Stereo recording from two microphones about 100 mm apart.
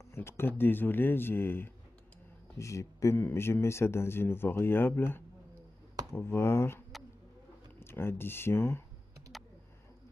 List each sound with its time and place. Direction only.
0.1 s speech: 25° left (ahead or behind)
7.8 s speech: 25° left (ahead or behind)
9.3 s a sound: centre (ahead or behind)